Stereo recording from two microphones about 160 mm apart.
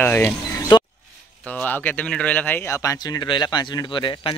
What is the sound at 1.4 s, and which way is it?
Speech, 10° left (ahead or behind).